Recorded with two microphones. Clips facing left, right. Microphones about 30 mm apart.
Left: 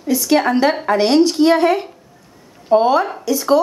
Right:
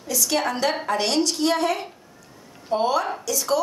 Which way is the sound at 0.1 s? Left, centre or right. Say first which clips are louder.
Left 9 dB; left.